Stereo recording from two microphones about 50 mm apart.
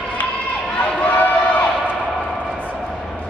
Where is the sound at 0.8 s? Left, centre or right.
Left.